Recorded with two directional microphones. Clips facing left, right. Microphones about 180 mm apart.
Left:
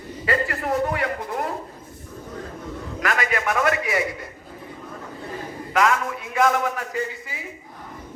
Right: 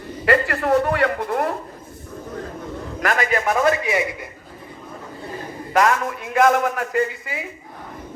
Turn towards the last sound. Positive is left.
turn(degrees=-60)  # may be behind; listen again after turning